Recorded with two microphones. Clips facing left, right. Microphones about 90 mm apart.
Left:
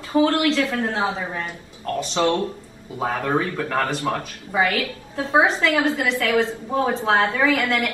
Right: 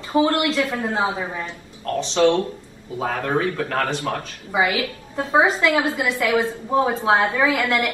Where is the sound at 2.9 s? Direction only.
15° left (ahead or behind).